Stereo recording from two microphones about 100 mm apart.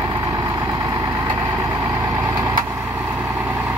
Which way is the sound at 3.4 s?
15° right (ahead or behind).